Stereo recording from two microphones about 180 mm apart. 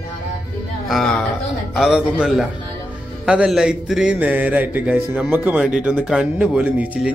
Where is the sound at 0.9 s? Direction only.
5° left (ahead or behind).